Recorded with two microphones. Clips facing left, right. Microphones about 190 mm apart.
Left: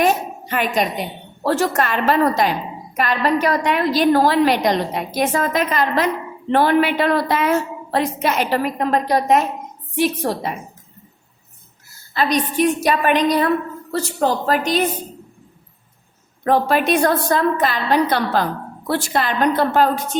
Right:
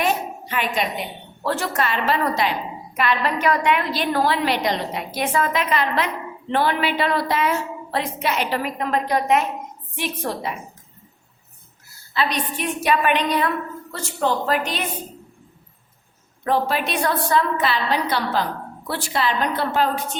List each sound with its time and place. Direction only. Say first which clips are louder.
0.0 s a woman's voice: left 5 dB; 45° left (ahead or behind)
12.1 s a woman's voice: left 5 dB; 40° left (ahead or behind)
16.4 s a woman's voice: left 5 dB; 50° left (ahead or behind)